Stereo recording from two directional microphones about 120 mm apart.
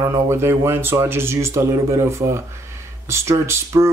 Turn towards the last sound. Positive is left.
turn(degrees=-25)  # may be behind; listen again after turning